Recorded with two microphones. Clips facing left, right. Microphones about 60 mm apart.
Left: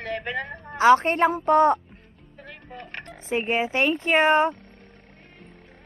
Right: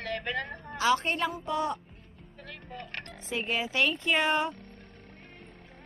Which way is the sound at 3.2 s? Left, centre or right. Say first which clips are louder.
Left 8 dB; left.